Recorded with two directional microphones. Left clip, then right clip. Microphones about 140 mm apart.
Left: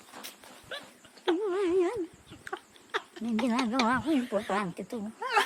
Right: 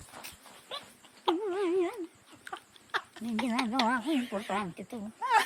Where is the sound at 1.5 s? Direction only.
20° left (ahead or behind).